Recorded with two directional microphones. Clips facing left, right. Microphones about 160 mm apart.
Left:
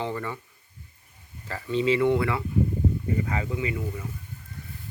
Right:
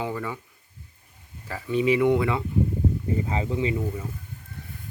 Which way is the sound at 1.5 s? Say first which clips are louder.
Right 1 dB; 10° right (ahead or behind).